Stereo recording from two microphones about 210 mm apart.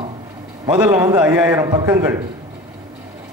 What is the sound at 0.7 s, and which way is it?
Speech, 5° right (ahead or behind).